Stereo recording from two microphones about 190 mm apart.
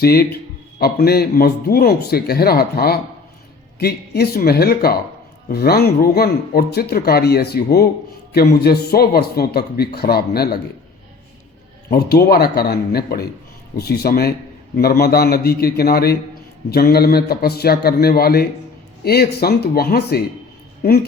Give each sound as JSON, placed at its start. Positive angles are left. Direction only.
{"t": 0.0, "sound": "speech", "side_deg": 55}
{"t": 11.9, "sound": "speech", "side_deg": 55}